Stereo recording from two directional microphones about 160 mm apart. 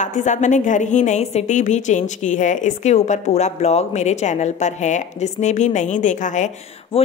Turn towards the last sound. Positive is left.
turn(degrees=35)  # may be behind; listen again after turning